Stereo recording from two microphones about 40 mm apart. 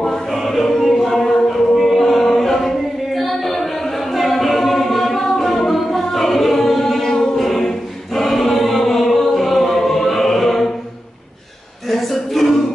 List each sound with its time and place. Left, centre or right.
0.0 s choir: centre
3.2 s a capella: centre
7.4 s choir: centre
11.9 s music: centre